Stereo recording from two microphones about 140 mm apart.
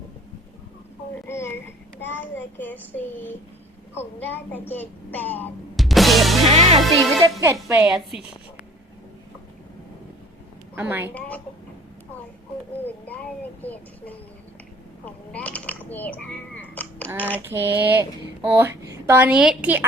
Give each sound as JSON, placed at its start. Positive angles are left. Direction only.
{"t": 1.3, "sound": "a sound", "side_deg": 20}
{"t": 2.0, "sound": "a child's voice", "side_deg": 15}
{"t": 5.7, "sound": "music", "side_deg": 0}
{"t": 6.5, "sound": "music", "side_deg": -50}
{"t": 7.2, "sound": "a woman's voice", "side_deg": -25}
{"t": 7.9, "sound": "a woman's voice", "side_deg": -5}
{"t": 10.8, "sound": "speech", "side_deg": -15}
{"t": 11.1, "sound": "a child's voice", "side_deg": 10}
{"t": 13.1, "sound": "a child's voice", "side_deg": 10}
{"t": 17.4, "sound": "speech", "side_deg": -15}